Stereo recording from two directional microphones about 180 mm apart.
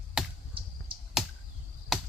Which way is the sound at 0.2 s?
5° right (ahead or behind).